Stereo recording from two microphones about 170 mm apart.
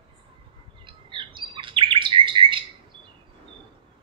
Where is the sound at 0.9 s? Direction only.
30° right (ahead or behind).